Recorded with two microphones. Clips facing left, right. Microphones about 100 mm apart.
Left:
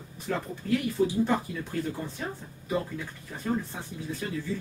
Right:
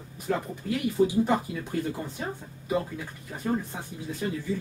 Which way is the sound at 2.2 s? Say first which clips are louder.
Right 2 dB; 15° right (ahead or behind).